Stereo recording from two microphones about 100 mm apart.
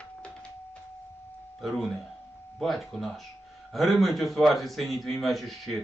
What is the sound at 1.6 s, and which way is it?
A man's voice, centre (ahead or behind).